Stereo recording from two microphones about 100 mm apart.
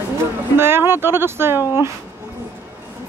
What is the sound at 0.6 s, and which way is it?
Speech, 25° right (ahead or behind).